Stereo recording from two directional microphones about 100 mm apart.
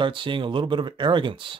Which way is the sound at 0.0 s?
55° right (ahead or behind).